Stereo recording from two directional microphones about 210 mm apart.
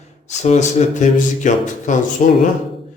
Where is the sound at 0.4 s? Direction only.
35° left (ahead or behind).